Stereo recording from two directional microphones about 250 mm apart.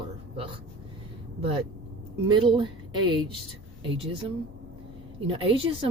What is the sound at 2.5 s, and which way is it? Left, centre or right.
Speech, centre.